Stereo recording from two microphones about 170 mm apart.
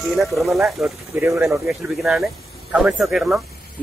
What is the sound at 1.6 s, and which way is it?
A man's voice, centre (ahead or behind).